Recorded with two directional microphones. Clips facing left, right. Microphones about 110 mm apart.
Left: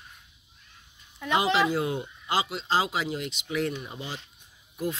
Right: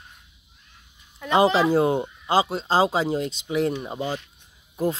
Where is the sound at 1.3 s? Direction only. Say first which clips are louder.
Right 6 dB; 35° right (ahead or behind).